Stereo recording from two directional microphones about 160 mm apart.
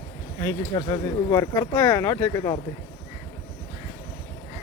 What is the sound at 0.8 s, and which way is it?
Speech, 30° left (ahead or behind).